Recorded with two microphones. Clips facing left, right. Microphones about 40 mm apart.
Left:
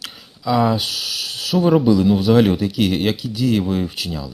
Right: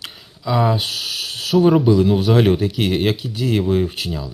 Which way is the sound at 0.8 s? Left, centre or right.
Right.